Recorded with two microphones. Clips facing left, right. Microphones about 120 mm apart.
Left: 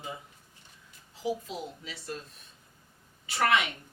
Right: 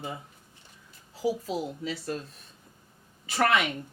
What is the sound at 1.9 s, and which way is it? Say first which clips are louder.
Speech: right 7 dB; 45° right (ahead or behind).